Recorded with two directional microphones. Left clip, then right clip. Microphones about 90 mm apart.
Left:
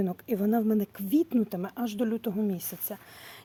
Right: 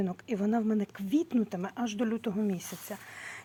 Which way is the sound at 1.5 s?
45° left (ahead or behind).